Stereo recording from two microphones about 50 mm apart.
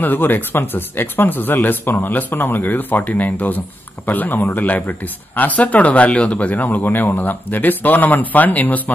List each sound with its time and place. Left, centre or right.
0.0 s speech: left